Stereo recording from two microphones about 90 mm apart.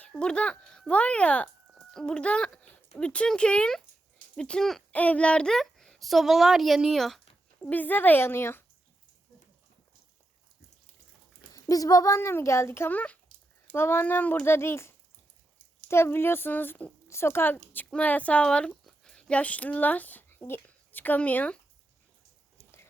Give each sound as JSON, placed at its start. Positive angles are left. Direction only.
{"t": 0.1, "sound": "a child's voice", "side_deg": 10}
{"t": 7.6, "sound": "speech", "side_deg": 20}
{"t": 11.5, "sound": "a child's voice", "side_deg": 40}
{"t": 17.1, "sound": "speech", "side_deg": 30}